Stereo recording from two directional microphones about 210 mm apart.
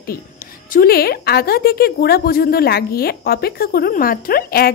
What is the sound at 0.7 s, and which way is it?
A woman's voice, 45° left (ahead or behind).